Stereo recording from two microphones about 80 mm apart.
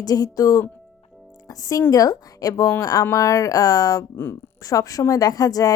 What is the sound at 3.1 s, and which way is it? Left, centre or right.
A woman's voice, left.